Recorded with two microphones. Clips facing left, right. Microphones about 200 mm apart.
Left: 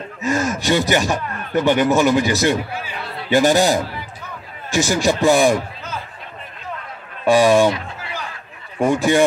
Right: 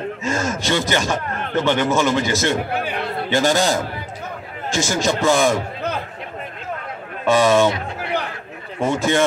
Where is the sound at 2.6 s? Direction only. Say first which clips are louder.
Right 5 dB; 60° right (ahead or behind).